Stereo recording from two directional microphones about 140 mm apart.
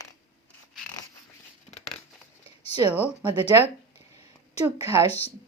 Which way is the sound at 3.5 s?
25° right (ahead or behind).